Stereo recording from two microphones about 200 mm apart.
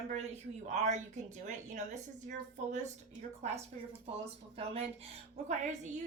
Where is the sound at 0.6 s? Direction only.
35° right (ahead or behind).